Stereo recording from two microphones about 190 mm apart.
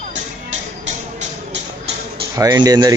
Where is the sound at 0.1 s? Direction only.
35° right (ahead or behind).